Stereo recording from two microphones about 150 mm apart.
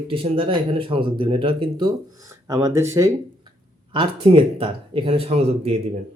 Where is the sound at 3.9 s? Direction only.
35° right (ahead or behind).